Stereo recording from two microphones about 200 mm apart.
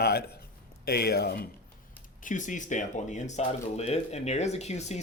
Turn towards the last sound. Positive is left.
turn(degrees=35)  # may be behind; listen again after turning